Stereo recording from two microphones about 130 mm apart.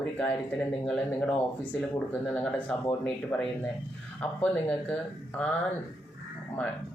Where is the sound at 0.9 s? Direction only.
10° left (ahead or behind).